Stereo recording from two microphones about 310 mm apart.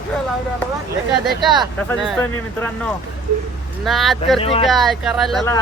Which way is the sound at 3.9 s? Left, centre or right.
Centre.